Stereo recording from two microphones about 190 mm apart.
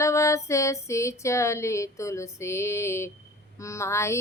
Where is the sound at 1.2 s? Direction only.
15° left (ahead or behind).